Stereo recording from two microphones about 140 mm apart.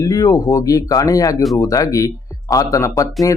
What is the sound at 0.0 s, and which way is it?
Speech, 25° left (ahead or behind).